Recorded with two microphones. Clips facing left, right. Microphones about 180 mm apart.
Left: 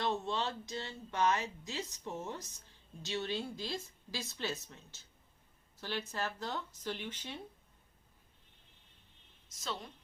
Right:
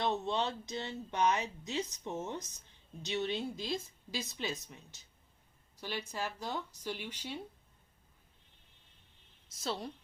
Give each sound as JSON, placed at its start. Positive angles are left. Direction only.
{"t": 0.0, "sound": "speech", "side_deg": -20}